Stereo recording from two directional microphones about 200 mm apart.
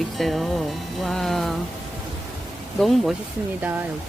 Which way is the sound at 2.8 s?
Centre (ahead or behind).